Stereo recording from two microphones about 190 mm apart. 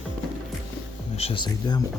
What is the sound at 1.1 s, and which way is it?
Speech, 30° left (ahead or behind).